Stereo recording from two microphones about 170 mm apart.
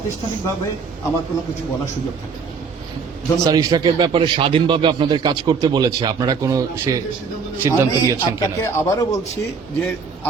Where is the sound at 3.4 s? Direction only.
20° right (ahead or behind).